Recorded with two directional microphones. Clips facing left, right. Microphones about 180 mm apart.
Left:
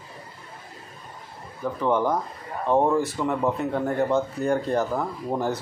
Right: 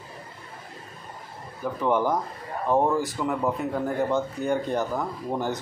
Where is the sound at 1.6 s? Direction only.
5° right (ahead or behind).